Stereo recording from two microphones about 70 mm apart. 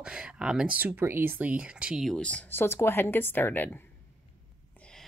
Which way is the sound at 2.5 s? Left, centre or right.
Left.